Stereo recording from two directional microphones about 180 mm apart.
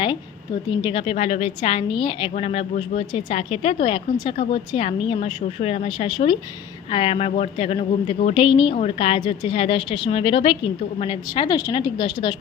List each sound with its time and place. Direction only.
0.7 s a woman's voice: 25° left (ahead or behind)